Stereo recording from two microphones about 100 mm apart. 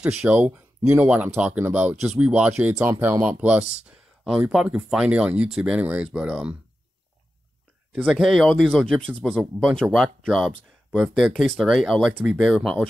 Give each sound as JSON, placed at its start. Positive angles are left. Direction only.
{"t": 0.0, "sound": "speech", "side_deg": -10}
{"t": 3.7, "sound": "a sound", "side_deg": -5}
{"t": 4.5, "sound": "speech", "side_deg": -10}
{"t": 7.9, "sound": "speech", "side_deg": -10}
{"t": 9.3, "sound": "speech", "side_deg": -5}